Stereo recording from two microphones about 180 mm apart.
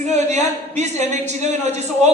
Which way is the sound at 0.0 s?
40° right (ahead or behind).